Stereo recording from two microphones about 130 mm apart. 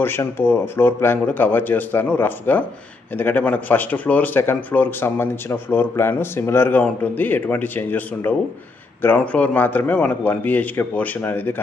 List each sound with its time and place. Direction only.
0.0 s speech: 20° left (ahead or behind)